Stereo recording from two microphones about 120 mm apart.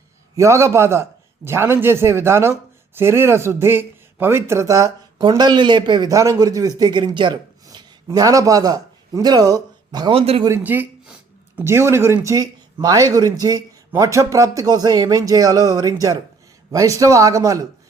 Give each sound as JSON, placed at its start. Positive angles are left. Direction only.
{"t": 0.3, "sound": "a man's voice", "side_deg": -25}
{"t": 10.1, "sound": "a man's voice", "side_deg": -55}
{"t": 10.5, "sound": "speech", "side_deg": -15}